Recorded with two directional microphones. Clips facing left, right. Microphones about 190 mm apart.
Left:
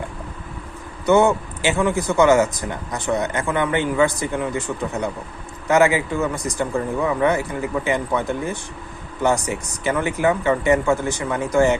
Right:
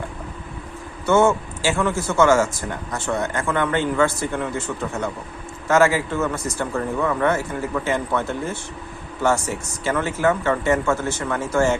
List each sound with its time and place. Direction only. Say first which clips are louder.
1.0 s a man's voice: left 1 dB; 15° left (ahead or behind)